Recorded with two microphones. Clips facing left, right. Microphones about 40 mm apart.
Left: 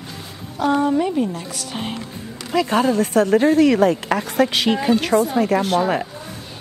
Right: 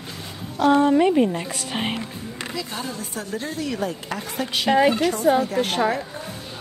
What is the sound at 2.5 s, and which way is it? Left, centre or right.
Speech, left.